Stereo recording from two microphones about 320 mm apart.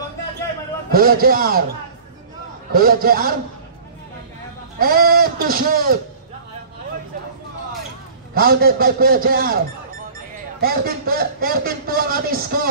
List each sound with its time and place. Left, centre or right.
0.9 s a man's voice: right
2.7 s a man's voice: right
4.7 s a man's voice: right
8.4 s a man's voice: right
10.6 s a man's voice: right